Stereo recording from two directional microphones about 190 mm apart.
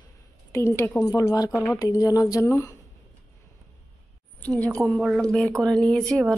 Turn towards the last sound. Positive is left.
turn(degrees=5)  # may be behind; listen again after turning